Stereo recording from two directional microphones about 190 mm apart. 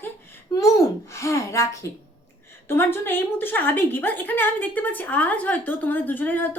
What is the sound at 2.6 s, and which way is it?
A woman's voice, 10° left (ahead or behind).